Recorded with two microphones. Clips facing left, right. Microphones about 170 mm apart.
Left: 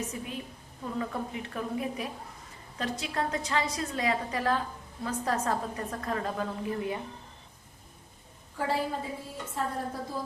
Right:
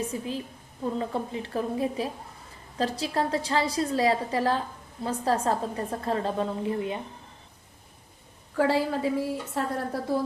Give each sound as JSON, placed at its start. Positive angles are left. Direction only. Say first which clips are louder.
{"t": 0.0, "sound": "a woman's voice", "louder": "right 5 dB", "side_deg": -30}
{"t": 8.5, "sound": "a woman's voice", "louder": "right 6 dB", "side_deg": -85}
{"t": 9.6, "sound": "a woman's voice", "louder": "right 2 dB", "side_deg": -70}